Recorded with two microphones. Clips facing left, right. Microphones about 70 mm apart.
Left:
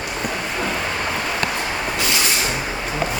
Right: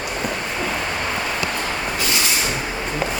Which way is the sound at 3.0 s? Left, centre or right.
Centre.